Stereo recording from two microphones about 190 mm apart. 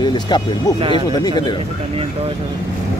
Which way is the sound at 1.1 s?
20° left (ahead or behind).